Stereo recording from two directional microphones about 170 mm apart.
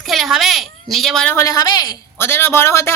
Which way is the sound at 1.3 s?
20° left (ahead or behind).